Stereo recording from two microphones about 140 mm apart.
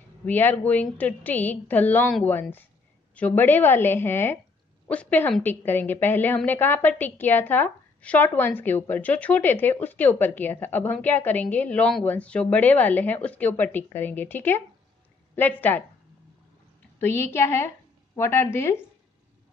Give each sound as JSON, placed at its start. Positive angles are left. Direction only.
{"t": 0.2, "sound": "a woman's voice", "side_deg": 15}
{"t": 3.2, "sound": "a woman's voice", "side_deg": 10}
{"t": 17.0, "sound": "a woman's voice", "side_deg": 15}